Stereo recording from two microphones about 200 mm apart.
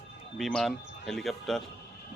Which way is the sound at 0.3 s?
Centre (ahead or behind).